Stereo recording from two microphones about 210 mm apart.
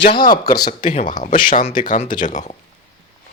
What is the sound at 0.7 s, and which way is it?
Speech, 35° left (ahead or behind).